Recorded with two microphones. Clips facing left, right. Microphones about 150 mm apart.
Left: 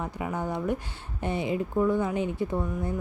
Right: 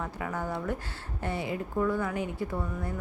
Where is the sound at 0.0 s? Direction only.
20° left (ahead or behind).